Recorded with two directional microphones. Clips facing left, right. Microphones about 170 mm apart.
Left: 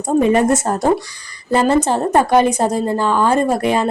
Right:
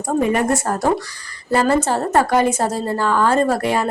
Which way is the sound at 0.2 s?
25° left (ahead or behind).